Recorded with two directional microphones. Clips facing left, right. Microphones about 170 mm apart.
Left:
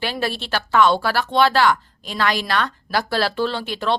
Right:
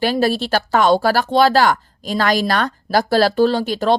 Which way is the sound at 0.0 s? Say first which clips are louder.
Right 8 dB; 40° right (ahead or behind).